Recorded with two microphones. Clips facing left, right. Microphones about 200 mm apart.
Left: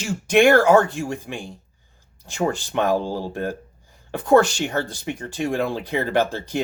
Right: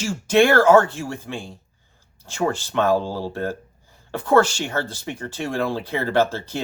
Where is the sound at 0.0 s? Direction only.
15° left (ahead or behind).